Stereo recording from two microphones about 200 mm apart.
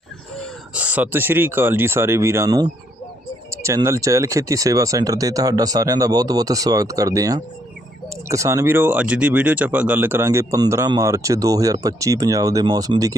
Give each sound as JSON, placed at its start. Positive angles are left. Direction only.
{"t": 0.7, "sound": "speech", "side_deg": -5}